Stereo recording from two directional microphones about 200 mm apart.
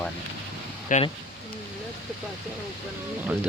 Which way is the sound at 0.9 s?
40° left (ahead or behind).